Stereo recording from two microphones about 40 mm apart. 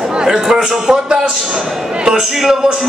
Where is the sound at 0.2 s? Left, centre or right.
Centre.